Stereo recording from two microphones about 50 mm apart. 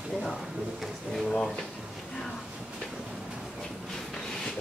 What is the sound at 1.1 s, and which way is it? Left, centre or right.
Drawer open or close, centre.